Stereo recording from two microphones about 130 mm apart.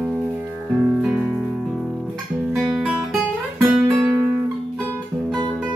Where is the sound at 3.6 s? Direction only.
20° right (ahead or behind).